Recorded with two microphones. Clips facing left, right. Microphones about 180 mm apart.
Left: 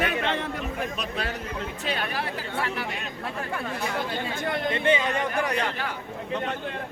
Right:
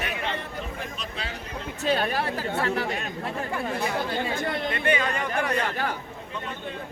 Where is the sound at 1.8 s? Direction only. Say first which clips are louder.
Right 7 dB; 40° right (ahead or behind).